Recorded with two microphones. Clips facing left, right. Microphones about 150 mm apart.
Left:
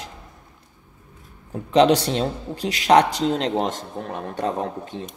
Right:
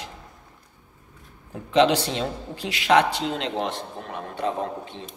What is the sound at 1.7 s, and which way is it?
A man's voice, 40° left (ahead or behind).